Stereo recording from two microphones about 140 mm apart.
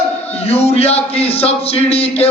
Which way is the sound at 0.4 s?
45° left (ahead or behind).